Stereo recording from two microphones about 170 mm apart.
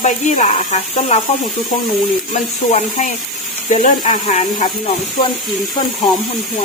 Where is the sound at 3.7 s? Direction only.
40° left (ahead or behind).